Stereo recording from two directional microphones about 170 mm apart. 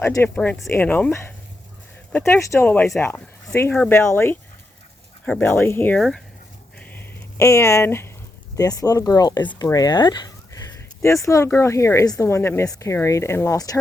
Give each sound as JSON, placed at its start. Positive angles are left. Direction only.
{"t": 0.0, "sound": "a woman's voice", "side_deg": 15}
{"t": 6.0, "sound": "speech", "side_deg": 0}
{"t": 6.7, "sound": "a sound", "side_deg": 10}
{"t": 8.5, "sound": "a woman's voice", "side_deg": 20}